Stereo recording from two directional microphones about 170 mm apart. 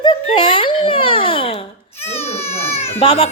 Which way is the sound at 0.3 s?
30° left (ahead or behind).